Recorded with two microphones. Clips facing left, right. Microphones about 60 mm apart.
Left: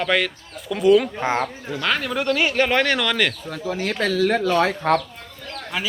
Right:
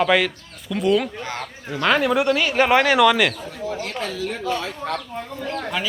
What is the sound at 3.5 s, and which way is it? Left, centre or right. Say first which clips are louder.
Speech: left 2 dB; left.